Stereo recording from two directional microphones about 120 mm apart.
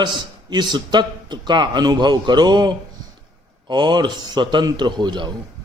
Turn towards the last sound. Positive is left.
turn(degrees=-40)  # may be behind; listen again after turning